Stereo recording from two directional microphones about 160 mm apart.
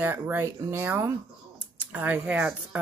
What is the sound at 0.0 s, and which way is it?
Speech, 10° right (ahead or behind).